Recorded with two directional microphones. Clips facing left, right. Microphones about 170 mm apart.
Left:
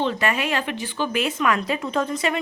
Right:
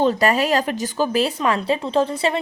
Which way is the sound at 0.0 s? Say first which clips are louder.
Right 6 dB; 40° right (ahead or behind).